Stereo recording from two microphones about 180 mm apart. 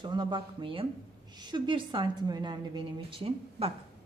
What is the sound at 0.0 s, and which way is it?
A woman's voice, 25° right (ahead or behind).